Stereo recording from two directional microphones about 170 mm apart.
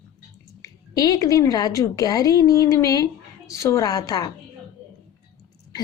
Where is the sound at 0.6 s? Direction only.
20° left (ahead or behind).